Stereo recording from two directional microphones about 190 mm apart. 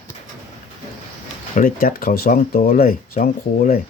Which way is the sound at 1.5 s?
45° left (ahead or behind).